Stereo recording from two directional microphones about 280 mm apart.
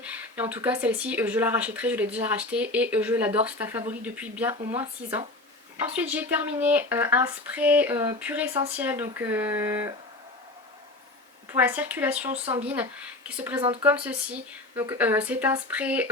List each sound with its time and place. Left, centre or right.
0.0 s speech: centre
4.5 s speech: centre
5.7 s speech: centre
11.5 s speech: centre
12.3 s speech: right
12.6 s speech: centre
13.6 s speech: centre
13.8 s speech: centre